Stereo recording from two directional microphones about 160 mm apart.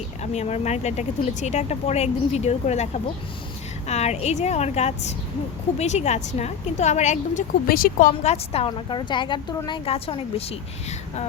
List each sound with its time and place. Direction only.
0.2 s speech: 45° left (ahead or behind)
7.7 s a woman's voice: 65° left (ahead or behind); by 11.3 s 40° left (ahead or behind)